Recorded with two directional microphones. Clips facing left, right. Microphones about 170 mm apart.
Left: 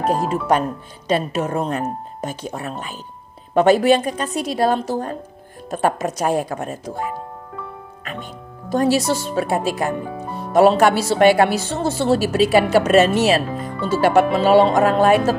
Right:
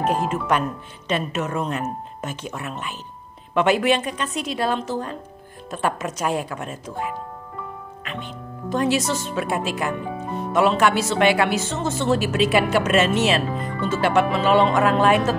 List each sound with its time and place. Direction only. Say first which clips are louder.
0.0 s speech: left 2 dB; 35° left (ahead or behind)